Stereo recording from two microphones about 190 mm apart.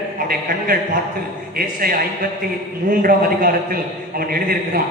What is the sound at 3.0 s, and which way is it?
Speech, 50° right (ahead or behind).